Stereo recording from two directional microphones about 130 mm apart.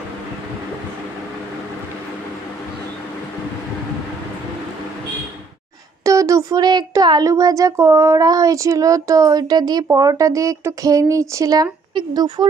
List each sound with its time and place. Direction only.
6.0 s speech: 25° right (ahead or behind)